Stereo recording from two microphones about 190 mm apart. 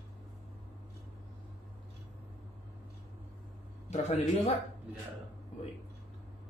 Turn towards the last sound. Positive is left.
turn(degrees=35)  # may be behind; listen again after turning